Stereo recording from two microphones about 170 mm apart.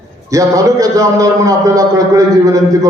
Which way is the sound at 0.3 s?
20° right (ahead or behind).